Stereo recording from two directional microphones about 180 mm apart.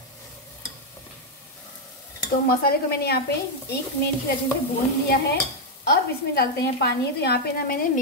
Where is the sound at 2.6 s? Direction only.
60° left (ahead or behind).